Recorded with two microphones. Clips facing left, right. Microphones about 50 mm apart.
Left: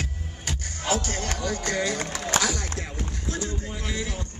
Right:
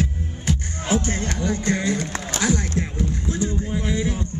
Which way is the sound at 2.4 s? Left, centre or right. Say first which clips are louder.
Right 5 dB; right.